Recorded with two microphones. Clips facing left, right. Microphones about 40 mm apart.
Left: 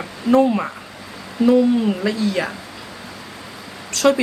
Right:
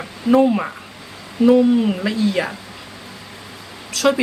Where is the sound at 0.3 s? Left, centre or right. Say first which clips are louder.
Right 1 dB; centre.